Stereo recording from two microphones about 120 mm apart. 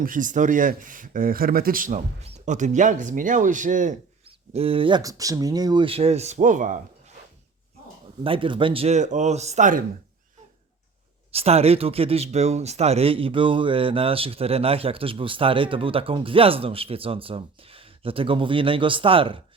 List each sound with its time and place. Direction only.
0.2 s speech: 90° right
4.5 s speech: 50° right (ahead or behind)
5.0 s speech: 30° right (ahead or behind)
5.8 s speech: 55° right (ahead or behind); by 6.7 s 90° right
8.2 s speech: 45° right (ahead or behind)
8.9 s speech: 85° right
11.3 s speech: 55° right (ahead or behind)